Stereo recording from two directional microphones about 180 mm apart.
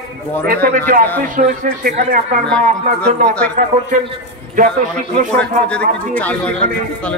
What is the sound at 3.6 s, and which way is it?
Speech, 40° right (ahead or behind).